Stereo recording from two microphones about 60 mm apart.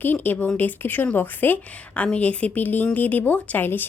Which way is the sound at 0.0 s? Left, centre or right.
Left.